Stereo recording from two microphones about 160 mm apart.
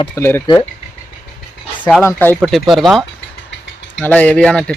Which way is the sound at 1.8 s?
10° left (ahead or behind).